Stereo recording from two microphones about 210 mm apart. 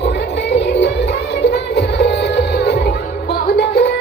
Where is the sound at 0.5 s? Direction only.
55° left (ahead or behind).